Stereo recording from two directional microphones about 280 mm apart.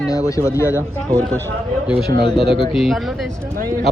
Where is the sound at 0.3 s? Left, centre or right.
Centre.